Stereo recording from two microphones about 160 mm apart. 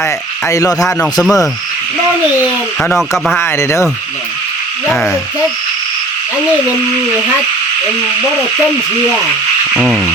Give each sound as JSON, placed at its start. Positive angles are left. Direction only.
{"t": 0.4, "sound": "speech", "side_deg": 20}
{"t": 1.2, "sound": "frog", "side_deg": 0}
{"t": 3.3, "sound": "speech", "side_deg": 15}
{"t": 4.9, "sound": "frog", "side_deg": 0}
{"t": 9.7, "sound": "frog", "side_deg": -5}